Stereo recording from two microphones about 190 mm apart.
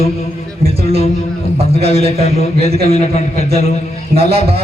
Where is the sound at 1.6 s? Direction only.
30° right (ahead or behind).